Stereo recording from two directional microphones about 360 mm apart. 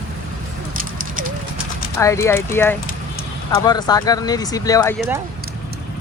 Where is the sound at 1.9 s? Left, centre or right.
Centre.